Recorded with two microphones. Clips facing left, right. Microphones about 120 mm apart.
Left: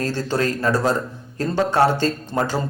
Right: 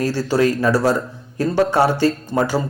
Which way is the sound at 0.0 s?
10° right (ahead or behind).